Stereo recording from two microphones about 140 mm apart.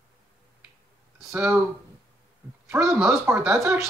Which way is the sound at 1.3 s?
15° right (ahead or behind).